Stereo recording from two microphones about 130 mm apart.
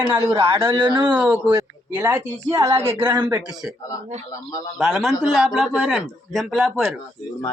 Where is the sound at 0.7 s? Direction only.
40° right (ahead or behind).